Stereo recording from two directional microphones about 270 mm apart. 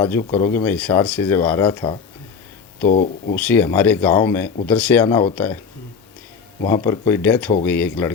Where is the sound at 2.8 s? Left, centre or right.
Left.